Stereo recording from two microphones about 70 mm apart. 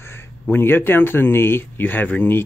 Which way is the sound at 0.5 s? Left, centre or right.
Left.